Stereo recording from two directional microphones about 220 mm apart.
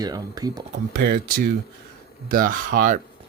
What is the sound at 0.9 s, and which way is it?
Speech, 40° right (ahead or behind).